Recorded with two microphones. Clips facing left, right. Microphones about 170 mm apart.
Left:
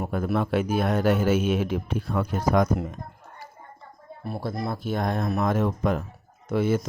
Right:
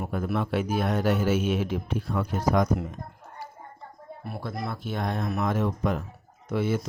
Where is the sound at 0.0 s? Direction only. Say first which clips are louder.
Left 3 dB; 45° left (ahead or behind).